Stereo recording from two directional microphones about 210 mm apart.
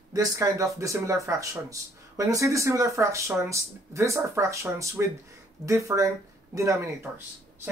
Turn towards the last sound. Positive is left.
turn(degrees=-15)  # may be behind; listen again after turning